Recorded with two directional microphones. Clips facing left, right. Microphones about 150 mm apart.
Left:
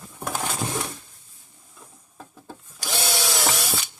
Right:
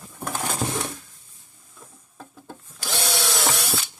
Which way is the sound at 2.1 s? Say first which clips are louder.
Right 1 dB; centre (ahead or behind).